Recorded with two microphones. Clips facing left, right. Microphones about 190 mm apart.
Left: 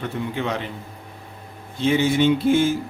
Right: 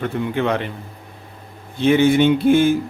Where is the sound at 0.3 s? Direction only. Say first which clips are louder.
Right 7 dB; 60° right (ahead or behind).